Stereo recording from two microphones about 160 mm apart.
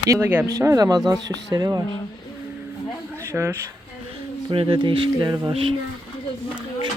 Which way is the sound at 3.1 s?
15° right (ahead or behind).